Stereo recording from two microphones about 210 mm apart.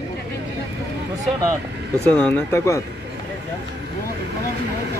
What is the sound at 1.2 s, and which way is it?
Vehicle, 15° right (ahead or behind).